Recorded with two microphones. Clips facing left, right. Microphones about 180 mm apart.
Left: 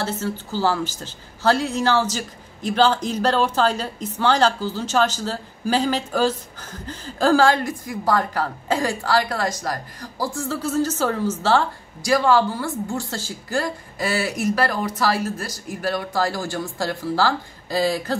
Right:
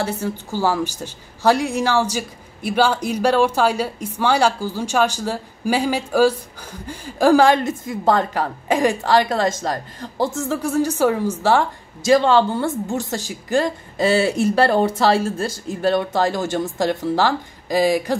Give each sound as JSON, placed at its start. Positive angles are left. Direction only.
{"t": 0.0, "sound": "a woman's voice", "side_deg": -15}